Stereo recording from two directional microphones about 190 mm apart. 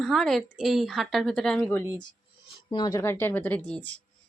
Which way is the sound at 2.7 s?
20° left (ahead or behind).